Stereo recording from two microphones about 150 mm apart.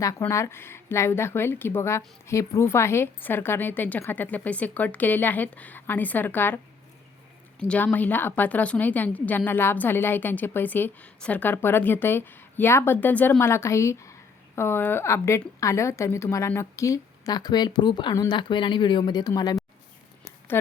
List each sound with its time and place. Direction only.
0.0 s a woman's voice: 20° left (ahead or behind)
7.6 s a woman's voice: 5° left (ahead or behind); by 19.5 s 25° left (ahead or behind)